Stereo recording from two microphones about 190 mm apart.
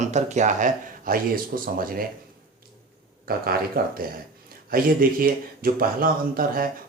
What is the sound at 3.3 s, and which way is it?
Speech, 50° right (ahead or behind).